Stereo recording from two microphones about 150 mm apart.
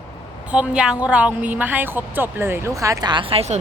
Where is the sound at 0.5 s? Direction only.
5° right (ahead or behind).